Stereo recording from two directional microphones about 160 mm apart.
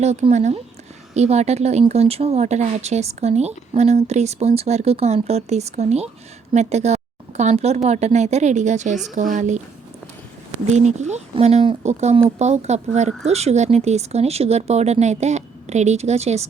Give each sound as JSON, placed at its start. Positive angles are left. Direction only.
{"t": 0.0, "sound": "a woman's voice", "side_deg": -45}
{"t": 10.7, "sound": "speech", "side_deg": -45}